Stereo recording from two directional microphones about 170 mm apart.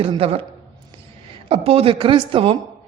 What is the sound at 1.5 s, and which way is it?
A man's voice, 35° right (ahead or behind).